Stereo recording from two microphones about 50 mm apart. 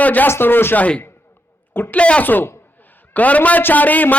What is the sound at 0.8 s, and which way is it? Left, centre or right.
Speech, left.